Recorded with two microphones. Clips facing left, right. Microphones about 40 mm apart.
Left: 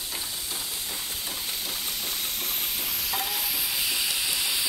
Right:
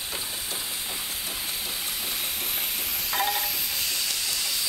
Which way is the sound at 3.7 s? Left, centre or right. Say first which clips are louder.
Left 2 dB; centre.